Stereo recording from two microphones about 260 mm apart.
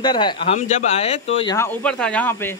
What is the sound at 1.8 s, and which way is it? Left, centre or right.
Speech, centre.